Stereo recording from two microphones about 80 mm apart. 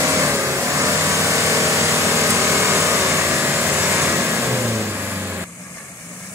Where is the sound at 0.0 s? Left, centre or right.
Right.